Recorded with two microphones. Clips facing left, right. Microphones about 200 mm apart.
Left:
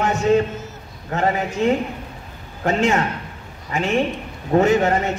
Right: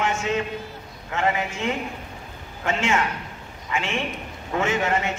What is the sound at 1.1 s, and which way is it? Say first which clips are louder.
A man's voice: left 4 dB; 35° left (ahead or behind).